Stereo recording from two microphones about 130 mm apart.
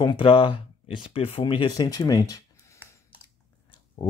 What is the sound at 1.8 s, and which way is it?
Speech, 30° left (ahead or behind).